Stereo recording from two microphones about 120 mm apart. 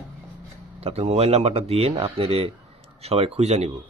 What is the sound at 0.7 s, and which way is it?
A man's voice, 60° right (ahead or behind).